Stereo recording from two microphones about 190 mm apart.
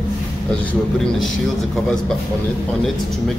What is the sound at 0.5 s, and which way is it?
Speech, 5° left (ahead or behind).